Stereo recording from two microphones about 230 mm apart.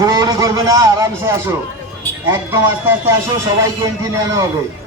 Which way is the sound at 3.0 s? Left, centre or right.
Centre.